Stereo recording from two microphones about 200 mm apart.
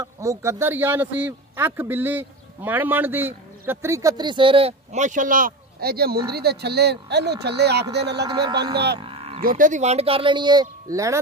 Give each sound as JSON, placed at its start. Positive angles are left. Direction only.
{"t": 0.0, "sound": "speech", "side_deg": -15}
{"t": 8.2, "sound": "speech", "side_deg": -20}
{"t": 8.9, "sound": "livestock", "side_deg": -25}
{"t": 9.4, "sound": "speech", "side_deg": -40}